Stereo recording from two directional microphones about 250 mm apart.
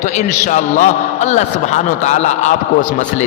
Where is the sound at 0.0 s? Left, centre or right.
Left.